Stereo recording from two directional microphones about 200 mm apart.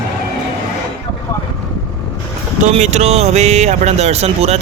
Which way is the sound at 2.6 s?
35° right (ahead or behind).